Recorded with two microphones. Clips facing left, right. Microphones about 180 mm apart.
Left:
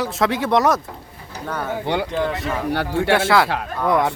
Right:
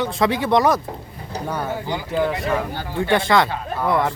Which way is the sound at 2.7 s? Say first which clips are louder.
Left 5 dB; 70° left (ahead or behind).